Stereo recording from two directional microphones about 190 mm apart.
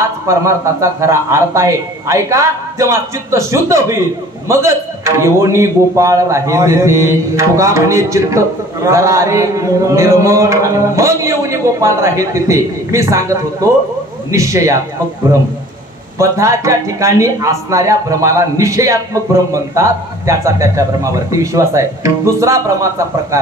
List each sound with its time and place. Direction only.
0.0 s a man's voice: 15° right (ahead or behind)
16.2 s a man's voice: 15° right (ahead or behind)